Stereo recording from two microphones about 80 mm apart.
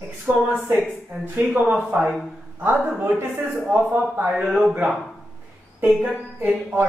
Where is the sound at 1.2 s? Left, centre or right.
Right.